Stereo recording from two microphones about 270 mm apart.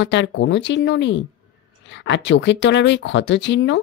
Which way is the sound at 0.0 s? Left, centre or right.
Left.